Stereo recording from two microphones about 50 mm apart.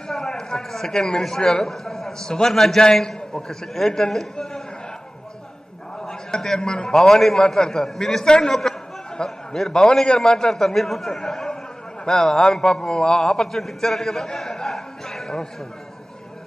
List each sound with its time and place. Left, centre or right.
0.1 s a man's voice: centre
6.0 s a man's voice: centre